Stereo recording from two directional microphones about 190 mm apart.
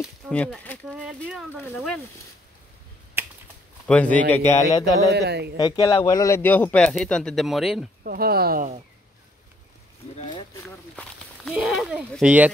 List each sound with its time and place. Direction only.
0.3 s speech: 5° left (ahead or behind)
0.8 s speech: 5° right (ahead or behind)
3.2 s computer keyboard: 10° right (ahead or behind)
3.8 s speech: 5° left (ahead or behind)
5.1 s speech: 60° right (ahead or behind)
5.6 s speech: 20° left (ahead or behind); by 7.8 s centre (ahead or behind)
8.0 s speech: 50° right (ahead or behind)
11.5 s speech: centre (ahead or behind)